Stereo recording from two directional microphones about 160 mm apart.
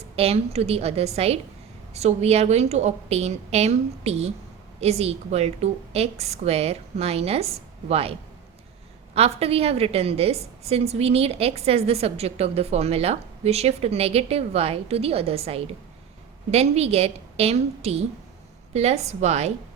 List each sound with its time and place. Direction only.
0.2 s a woman's voice: 40° right (ahead or behind)
9.1 s a woman's voice: 40° right (ahead or behind)